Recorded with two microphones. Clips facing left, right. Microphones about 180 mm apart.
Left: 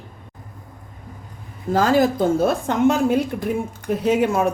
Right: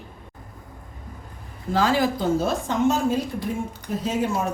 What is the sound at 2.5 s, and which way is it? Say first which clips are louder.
Speech: left 4 dB; 60° left (ahead or behind).